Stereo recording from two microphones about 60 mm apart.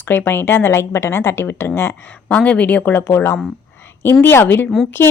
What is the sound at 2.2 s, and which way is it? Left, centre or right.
Speech, left.